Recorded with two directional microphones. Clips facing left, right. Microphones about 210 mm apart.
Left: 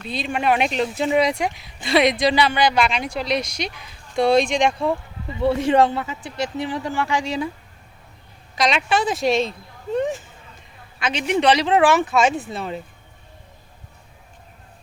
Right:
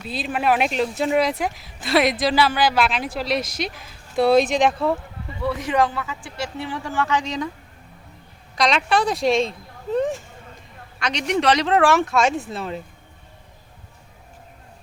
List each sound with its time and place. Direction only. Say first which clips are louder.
0.0 s speech: even; 5° right (ahead or behind)
5.4 s speech: left 4 dB; 30° left (ahead or behind); by 7.5 s 10° left (ahead or behind)
8.5 s speech: right 1 dB; centre (ahead or behind)